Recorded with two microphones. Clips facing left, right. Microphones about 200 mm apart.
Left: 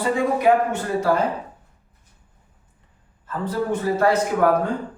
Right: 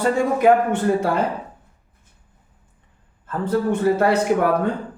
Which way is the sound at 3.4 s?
55° right (ahead or behind).